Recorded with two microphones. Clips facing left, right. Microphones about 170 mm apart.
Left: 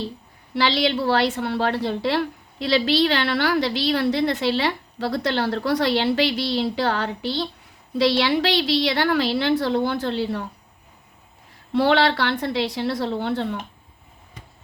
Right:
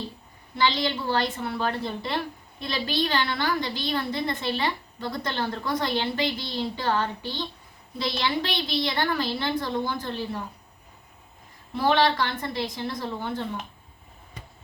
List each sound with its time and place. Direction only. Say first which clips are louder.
0.5 s a woman's voice: left 4 dB; 80° left
11.7 s a woman's voice: left 4 dB; 75° left (ahead or behind)